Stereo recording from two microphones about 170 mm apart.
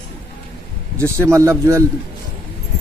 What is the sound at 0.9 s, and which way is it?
Speech, 15° right (ahead or behind).